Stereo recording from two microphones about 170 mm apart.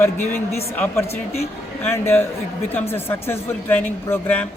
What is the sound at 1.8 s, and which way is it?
A man's voice, 10° left (ahead or behind).